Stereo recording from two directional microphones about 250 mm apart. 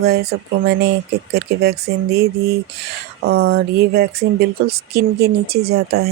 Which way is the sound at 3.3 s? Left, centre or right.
Right.